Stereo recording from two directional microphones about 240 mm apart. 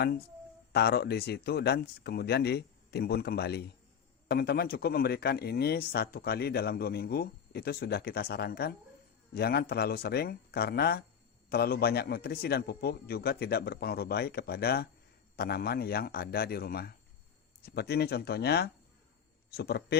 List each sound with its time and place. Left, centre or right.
0.7 s a man's voice: left